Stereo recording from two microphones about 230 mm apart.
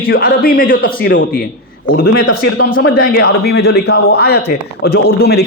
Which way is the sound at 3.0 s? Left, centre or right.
Left.